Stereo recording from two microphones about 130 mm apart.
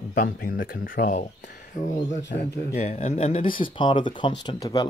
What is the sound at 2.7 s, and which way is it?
Speech, 55° left (ahead or behind).